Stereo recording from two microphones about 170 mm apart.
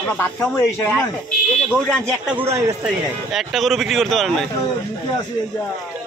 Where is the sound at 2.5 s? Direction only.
20° right (ahead or behind).